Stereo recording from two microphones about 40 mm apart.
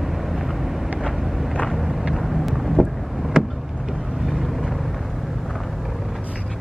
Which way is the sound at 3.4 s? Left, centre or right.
Centre.